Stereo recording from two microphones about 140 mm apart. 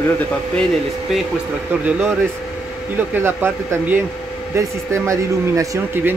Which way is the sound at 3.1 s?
15° right (ahead or behind).